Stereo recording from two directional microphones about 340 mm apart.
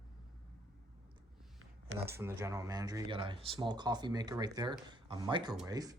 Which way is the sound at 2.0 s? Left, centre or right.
Centre.